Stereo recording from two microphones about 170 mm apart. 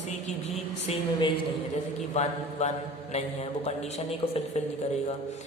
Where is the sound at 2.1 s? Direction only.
40° left (ahead or behind).